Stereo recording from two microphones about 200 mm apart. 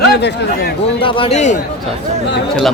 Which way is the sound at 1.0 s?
25° left (ahead or behind).